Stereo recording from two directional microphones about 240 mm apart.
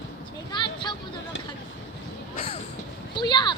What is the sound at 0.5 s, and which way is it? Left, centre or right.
Vehicle, centre.